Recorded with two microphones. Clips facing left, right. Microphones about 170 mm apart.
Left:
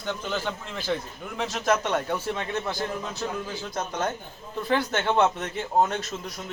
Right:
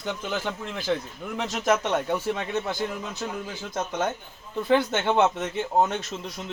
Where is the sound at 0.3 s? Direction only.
15° right (ahead or behind).